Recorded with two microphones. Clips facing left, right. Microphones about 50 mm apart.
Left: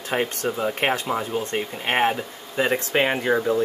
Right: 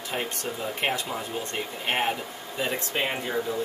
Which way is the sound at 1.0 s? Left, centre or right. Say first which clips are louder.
Left 7 dB; left.